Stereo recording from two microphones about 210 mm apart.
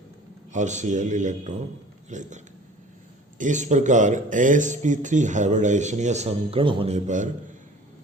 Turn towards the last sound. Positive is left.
turn(degrees=-35)  # may be behind; listen again after turning